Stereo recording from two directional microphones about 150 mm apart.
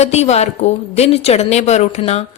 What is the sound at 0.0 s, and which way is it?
A woman's voice, 45° left (ahead or behind).